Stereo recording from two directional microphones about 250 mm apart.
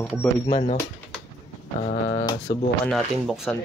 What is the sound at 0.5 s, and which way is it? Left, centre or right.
Speech, left.